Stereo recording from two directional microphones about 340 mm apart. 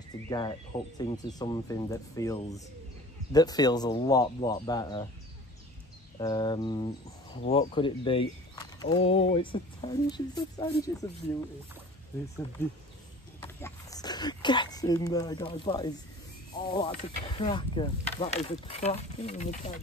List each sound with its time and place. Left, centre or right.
0.3 s speech: centre
6.1 s speech: centre
13.4 s speech: centre